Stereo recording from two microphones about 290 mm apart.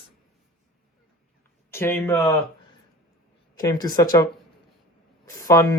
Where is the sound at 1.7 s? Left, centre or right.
Centre.